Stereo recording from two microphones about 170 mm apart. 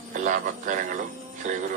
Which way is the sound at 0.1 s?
50° right (ahead or behind).